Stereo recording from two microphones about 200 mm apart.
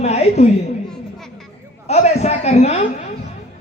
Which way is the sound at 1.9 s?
30° left (ahead or behind).